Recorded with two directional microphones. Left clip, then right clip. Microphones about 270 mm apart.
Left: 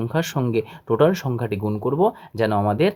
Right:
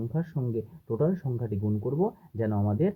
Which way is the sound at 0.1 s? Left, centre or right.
Left.